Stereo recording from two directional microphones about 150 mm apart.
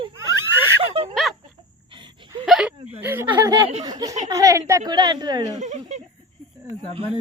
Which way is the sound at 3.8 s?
25° right (ahead or behind).